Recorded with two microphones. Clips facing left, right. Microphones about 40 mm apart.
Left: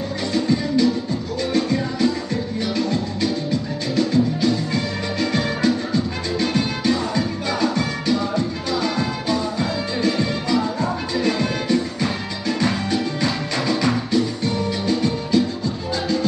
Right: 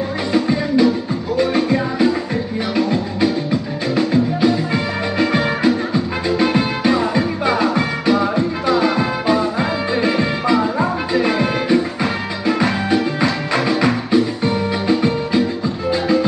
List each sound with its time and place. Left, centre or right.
0.3 s music: centre